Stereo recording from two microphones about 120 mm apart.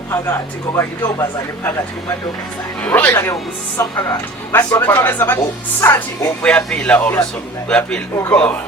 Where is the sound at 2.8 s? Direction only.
15° left (ahead or behind).